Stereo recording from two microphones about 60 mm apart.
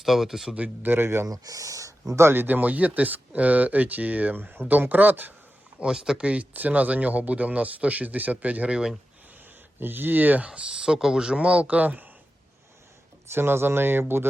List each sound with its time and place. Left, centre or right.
0.0 s speech: centre
0.5 s speech: right
1.3 s speech: right
2.2 s speech: right
5.8 s speech: centre
8.7 s speech: centre
9.8 s speech: right
13.3 s speech: right